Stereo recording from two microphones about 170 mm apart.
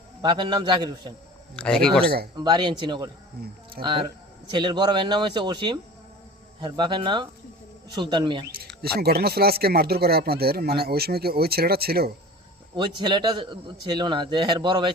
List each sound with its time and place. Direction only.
0.2 s speech: 25° right (ahead or behind)
1.5 s speech: 5° left (ahead or behind)
2.3 s speech: 25° right (ahead or behind)
8.5 s speech: 65° right (ahead or behind)
13.0 s speech: 25° right (ahead or behind)